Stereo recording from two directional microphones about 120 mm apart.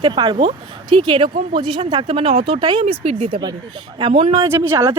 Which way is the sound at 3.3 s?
35° right (ahead or behind).